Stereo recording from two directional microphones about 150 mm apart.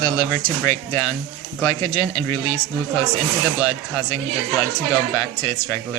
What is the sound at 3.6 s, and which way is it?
Speech, 15° left (ahead or behind).